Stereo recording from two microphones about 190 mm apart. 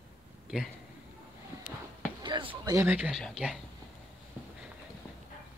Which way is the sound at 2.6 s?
15° right (ahead or behind).